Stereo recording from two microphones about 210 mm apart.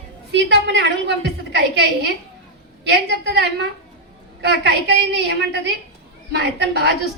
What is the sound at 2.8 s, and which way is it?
A woman's voice, 55° right (ahead or behind).